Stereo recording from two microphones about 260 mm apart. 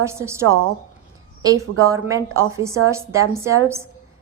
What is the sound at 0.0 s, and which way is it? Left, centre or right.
Speech, centre.